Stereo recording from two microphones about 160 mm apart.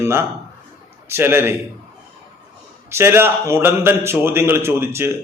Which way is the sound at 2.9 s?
15° right (ahead or behind).